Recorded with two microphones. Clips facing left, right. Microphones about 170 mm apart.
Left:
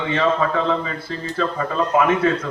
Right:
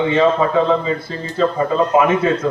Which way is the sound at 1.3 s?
20° right (ahead or behind).